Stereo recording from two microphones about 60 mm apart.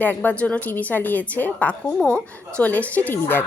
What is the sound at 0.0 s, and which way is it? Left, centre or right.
A woman's voice, left.